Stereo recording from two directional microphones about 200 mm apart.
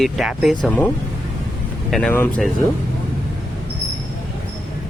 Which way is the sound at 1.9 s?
5° left (ahead or behind).